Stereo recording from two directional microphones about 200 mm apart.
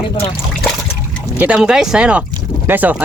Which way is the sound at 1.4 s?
5° right (ahead or behind).